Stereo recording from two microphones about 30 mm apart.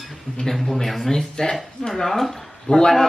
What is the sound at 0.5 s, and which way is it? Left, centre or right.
Speech, centre.